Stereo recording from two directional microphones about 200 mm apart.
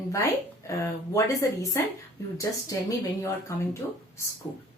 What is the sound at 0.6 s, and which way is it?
A woman's voice, 15° left (ahead or behind).